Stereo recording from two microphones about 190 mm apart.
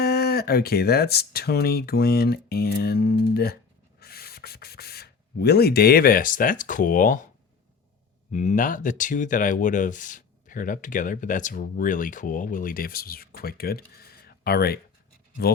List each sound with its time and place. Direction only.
0.0 s speech: 55° left (ahead or behind)
8.3 s speech: 40° left (ahead or behind)